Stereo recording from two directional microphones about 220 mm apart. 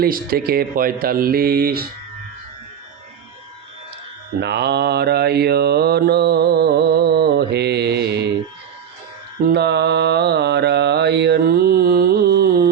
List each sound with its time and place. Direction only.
0.0 s mantra: 45° right (ahead or behind)
4.4 s mantra: 50° right (ahead or behind)
9.5 s mantra: 50° right (ahead or behind)